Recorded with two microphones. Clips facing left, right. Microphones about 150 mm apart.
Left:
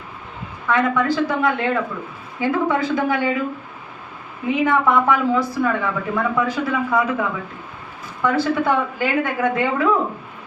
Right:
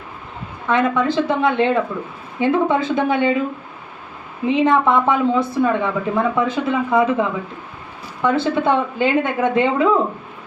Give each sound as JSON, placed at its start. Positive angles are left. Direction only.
{"t": 0.7, "sound": "speech", "side_deg": -25}
{"t": 4.4, "sound": "speech", "side_deg": -25}